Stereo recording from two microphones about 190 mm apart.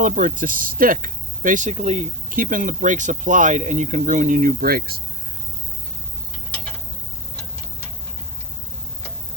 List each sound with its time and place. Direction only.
0.0 s speech: 45° right (ahead or behind)